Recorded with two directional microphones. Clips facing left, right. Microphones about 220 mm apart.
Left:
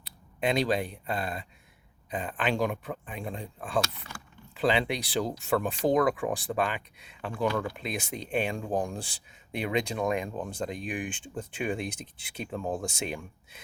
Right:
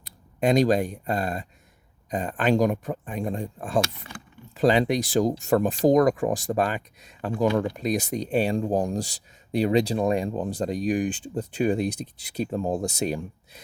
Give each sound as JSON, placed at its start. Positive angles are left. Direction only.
{"t": 0.0, "sound": "speech", "side_deg": -45}
{"t": 7.4, "sound": "speech", "side_deg": -25}
{"t": 7.8, "sound": "speech", "side_deg": -40}